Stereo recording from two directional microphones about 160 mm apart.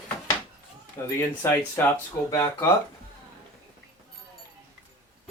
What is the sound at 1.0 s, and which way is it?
Speech, 15° left (ahead or behind).